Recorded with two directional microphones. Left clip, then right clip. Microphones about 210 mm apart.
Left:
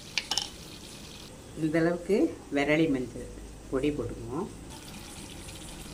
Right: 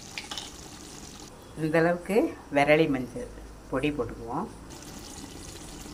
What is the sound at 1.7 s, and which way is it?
Speech, 15° right (ahead or behind).